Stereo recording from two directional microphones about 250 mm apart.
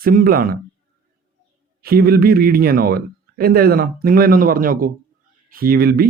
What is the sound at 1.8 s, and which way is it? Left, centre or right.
A man's voice, right.